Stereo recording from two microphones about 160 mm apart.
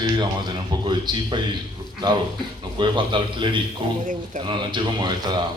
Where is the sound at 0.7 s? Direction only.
25° right (ahead or behind).